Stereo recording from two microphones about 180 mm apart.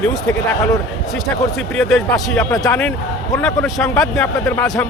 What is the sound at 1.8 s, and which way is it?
Speech, centre (ahead or behind).